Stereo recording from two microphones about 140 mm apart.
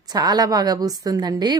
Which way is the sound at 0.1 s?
30° right (ahead or behind).